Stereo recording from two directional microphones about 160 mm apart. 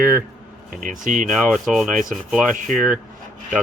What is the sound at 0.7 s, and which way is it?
Speech, 60° right (ahead or behind).